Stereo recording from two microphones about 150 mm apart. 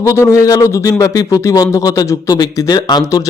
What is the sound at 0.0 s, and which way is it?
Speech, 20° left (ahead or behind).